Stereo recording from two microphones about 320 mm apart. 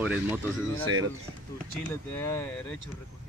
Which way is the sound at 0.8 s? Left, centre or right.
Right.